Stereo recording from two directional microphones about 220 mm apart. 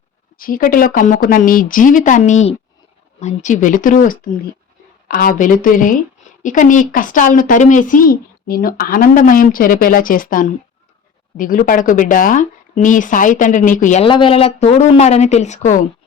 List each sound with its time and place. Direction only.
0.3 s speech: 40° left (ahead or behind)